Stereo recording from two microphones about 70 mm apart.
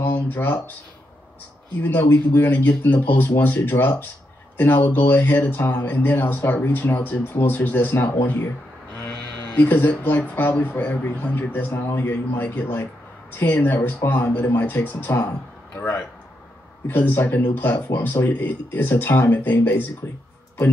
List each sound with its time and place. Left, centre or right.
0.0 s speech: left
1.8 s speech: left
16.8 s speech: left